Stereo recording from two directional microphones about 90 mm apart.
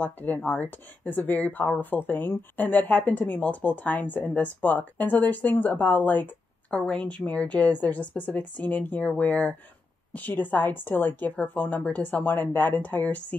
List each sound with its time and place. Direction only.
0.0 s speech: 20° left (ahead or behind)